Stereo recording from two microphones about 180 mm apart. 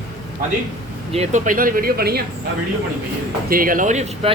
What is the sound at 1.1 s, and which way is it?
Speech, 40° right (ahead or behind).